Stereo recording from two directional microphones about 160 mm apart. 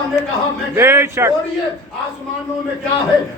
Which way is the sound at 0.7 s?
15° right (ahead or behind).